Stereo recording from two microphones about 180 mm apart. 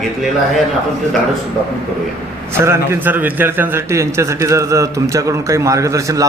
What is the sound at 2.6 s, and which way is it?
A man's voice, 15° right (ahead or behind).